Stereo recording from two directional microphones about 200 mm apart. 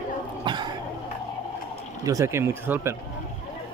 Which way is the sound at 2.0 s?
15° right (ahead or behind).